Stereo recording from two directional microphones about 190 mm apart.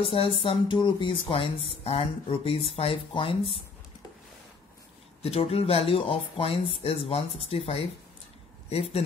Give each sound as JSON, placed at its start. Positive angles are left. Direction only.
{"t": 0.0, "sound": "speech", "side_deg": 30}
{"t": 5.2, "sound": "speech", "side_deg": 30}